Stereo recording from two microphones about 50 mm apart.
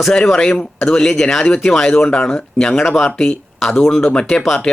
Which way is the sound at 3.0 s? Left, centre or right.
Left.